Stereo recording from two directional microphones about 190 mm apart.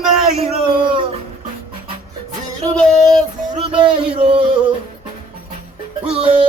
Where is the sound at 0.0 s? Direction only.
Centre (ahead or behind).